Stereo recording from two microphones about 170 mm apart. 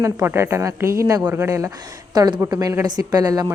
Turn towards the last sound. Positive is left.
turn(degrees=-20)  # may be behind; listen again after turning